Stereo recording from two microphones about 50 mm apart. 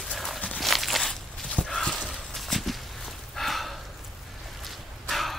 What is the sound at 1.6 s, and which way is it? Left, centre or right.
Horse, left.